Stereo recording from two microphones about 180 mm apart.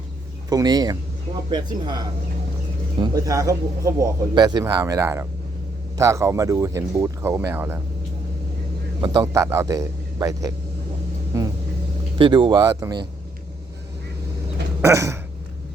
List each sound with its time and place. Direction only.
0.5 s speech: 20° right (ahead or behind)
9.0 s speech: 20° right (ahead or behind)
14.8 s a sound: 15° right (ahead or behind)